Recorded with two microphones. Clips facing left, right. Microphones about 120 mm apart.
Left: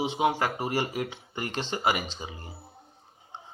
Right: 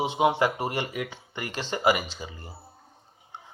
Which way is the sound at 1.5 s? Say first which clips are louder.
Right 1 dB; 50° right (ahead or behind).